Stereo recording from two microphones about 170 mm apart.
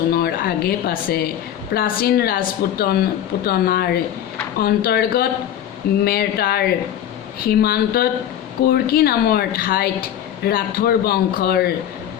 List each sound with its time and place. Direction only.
0.1 s a woman's voice: 65° left (ahead or behind)